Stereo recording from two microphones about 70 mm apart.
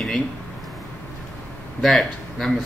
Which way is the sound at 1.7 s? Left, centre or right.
Centre.